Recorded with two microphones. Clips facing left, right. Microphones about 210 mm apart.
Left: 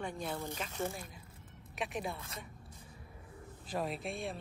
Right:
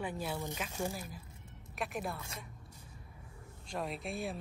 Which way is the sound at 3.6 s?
Centre (ahead or behind).